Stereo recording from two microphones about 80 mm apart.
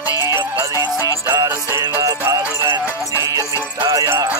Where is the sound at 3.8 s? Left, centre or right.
Right.